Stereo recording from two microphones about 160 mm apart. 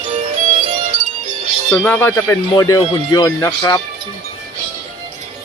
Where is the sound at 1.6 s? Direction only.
10° left (ahead or behind).